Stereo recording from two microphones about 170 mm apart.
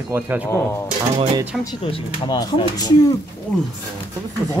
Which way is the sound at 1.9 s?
30° left (ahead or behind).